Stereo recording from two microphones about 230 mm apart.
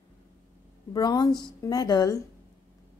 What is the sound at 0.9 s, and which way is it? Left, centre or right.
A woman's voice, centre.